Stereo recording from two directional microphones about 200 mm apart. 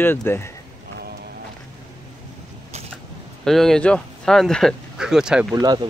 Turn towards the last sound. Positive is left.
turn(degrees=-20)  # may be behind; listen again after turning